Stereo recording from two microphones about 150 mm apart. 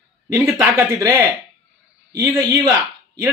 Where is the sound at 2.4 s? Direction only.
20° right (ahead or behind).